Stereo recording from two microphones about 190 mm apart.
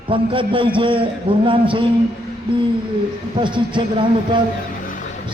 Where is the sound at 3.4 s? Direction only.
25° right (ahead or behind).